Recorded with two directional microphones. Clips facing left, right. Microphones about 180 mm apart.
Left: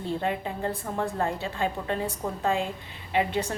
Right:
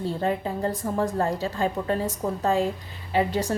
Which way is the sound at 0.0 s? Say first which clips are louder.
Right 3 dB; 40° right (ahead or behind).